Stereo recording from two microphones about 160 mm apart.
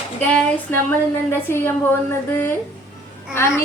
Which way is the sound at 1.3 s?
15° left (ahead or behind).